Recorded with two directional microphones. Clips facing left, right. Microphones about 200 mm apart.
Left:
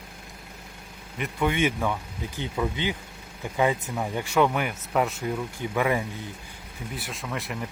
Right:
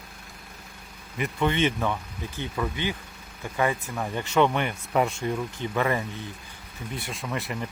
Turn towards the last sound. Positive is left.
turn(degrees=0)  # may be behind; listen again after turning